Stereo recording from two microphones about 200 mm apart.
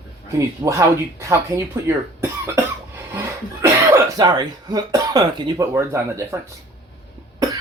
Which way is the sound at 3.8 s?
15° right (ahead or behind).